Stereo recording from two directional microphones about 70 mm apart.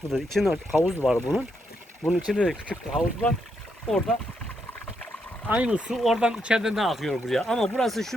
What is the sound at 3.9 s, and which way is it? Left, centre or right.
Speech, centre.